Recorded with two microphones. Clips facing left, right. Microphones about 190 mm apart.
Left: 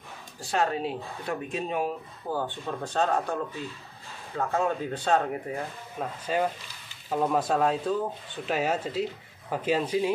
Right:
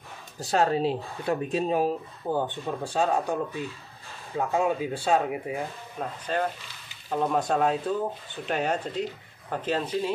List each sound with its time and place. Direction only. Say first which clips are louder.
0.4 s speech: right 4 dB; 35° right (ahead or behind)
2.3 s speech: right 2 dB; 15° right (ahead or behind)
5.9 s speech: left 1 dB; 10° left (ahead or behind)